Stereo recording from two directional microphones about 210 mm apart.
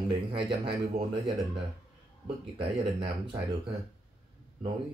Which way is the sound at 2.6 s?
25° right (ahead or behind).